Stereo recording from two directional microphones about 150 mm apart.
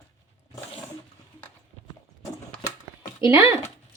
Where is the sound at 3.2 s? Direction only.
20° right (ahead or behind).